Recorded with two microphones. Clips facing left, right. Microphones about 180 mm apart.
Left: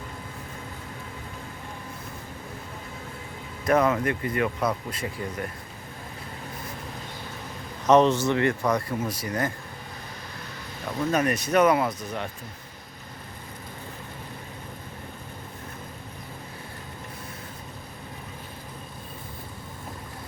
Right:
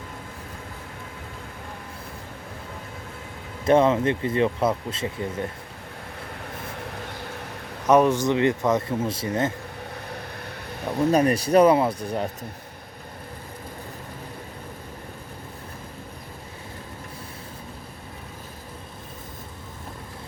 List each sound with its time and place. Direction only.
3.7 s speech: 25° right (ahead or behind)
7.9 s speech: 10° right (ahead or behind); by 9.5 s 25° right (ahead or behind)
10.9 s speech: 35° right (ahead or behind)